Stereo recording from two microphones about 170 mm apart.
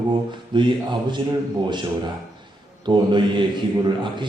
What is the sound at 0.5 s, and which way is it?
Speech, 25° right (ahead or behind).